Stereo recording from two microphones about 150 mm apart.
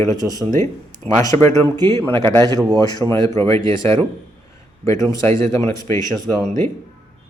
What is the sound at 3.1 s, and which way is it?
Speech, 20° left (ahead or behind).